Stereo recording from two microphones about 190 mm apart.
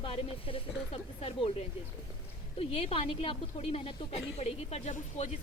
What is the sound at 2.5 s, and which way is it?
A woman's voice, 30° left (ahead or behind).